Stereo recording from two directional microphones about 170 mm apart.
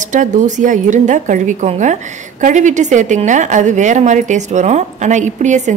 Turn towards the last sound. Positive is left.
turn(degrees=-45)  # may be behind; listen again after turning